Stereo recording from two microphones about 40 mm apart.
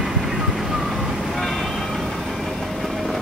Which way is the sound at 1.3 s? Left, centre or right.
Centre.